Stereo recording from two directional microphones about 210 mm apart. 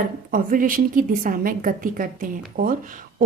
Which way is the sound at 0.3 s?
40° right (ahead or behind).